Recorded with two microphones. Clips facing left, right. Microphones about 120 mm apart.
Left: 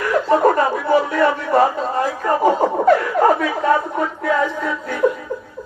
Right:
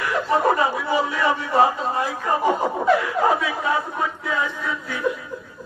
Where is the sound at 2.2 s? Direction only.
55° left (ahead or behind).